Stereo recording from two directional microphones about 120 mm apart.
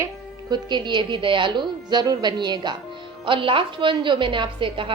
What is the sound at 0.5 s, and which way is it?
A woman's voice, 40° right (ahead or behind).